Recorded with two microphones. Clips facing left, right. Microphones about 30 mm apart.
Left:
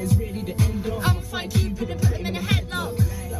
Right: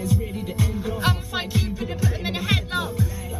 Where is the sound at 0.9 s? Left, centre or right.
Right.